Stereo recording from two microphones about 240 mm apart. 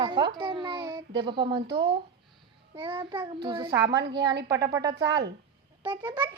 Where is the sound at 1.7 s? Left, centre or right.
Right.